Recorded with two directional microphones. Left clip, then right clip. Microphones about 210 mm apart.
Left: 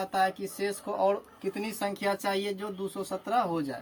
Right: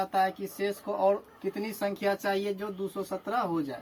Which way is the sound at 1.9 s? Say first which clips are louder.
Right 1 dB; 25° left (ahead or behind).